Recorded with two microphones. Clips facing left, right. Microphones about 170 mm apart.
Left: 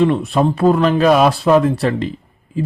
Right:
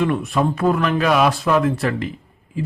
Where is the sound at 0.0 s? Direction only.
30° left (ahead or behind).